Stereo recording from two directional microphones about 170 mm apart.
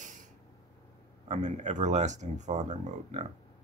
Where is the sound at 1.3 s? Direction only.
45° right (ahead or behind).